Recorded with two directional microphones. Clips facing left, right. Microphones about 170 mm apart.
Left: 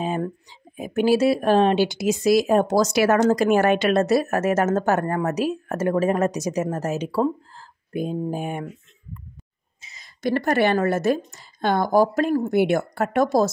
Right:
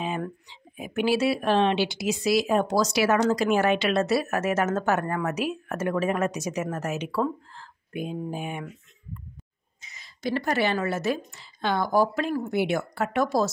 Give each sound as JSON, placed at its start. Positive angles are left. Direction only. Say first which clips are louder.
{"t": 0.0, "sound": "speech", "louder": "left 5 dB", "side_deg": 40}
{"t": 10.0, "sound": "a woman's voice", "louder": "left 5 dB", "side_deg": 55}